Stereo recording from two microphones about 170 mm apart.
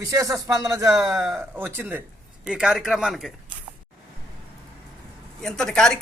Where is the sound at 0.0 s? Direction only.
20° right (ahead or behind).